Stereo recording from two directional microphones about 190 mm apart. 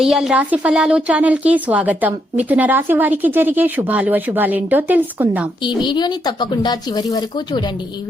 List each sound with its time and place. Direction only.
0.0 s a woman's voice: 5° right (ahead or behind)
5.6 s speech: 25° left (ahead or behind)